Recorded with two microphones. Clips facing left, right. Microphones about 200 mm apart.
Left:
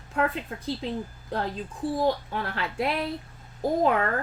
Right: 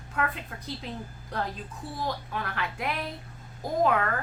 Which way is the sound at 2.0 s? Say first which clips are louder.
Left 4 dB; 30° left (ahead or behind).